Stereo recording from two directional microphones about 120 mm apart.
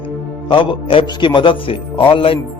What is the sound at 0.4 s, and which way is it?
A man's voice, 45° left (ahead or behind).